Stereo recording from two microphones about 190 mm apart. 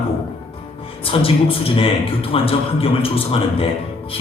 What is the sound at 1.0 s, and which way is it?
A man's voice, 30° left (ahead or behind).